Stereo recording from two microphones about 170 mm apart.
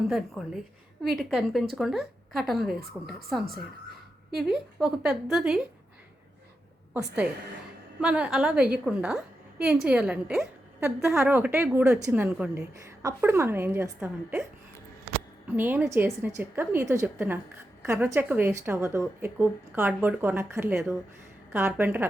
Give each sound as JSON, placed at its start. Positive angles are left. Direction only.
{"t": 0.1, "sound": "a woman's voice", "side_deg": 0}
{"t": 4.4, "sound": "a woman's voice", "side_deg": 0}
{"t": 6.9, "sound": "a woman's voice", "side_deg": -10}
{"t": 15.5, "sound": "a woman's voice", "side_deg": -10}